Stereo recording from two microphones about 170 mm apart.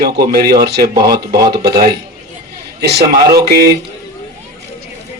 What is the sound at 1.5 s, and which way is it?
A man's voice, 70° right (ahead or behind).